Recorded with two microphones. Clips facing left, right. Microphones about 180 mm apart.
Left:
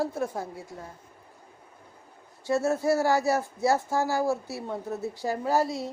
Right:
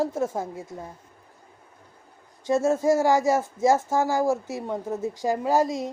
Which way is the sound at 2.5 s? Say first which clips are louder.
Right 3 dB; 15° right (ahead or behind).